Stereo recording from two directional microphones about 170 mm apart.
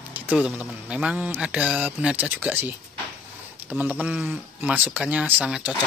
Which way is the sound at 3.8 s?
10° right (ahead or behind).